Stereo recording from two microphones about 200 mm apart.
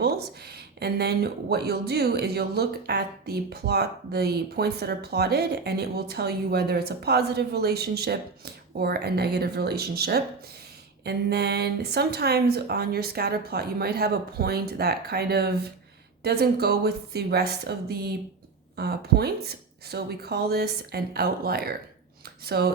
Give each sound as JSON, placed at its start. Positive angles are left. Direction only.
{"t": 0.0, "sound": "speech", "side_deg": -50}